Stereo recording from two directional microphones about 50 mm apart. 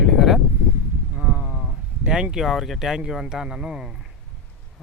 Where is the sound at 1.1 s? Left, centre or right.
Right.